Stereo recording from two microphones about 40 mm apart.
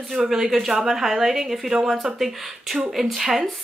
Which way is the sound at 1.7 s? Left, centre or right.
Centre.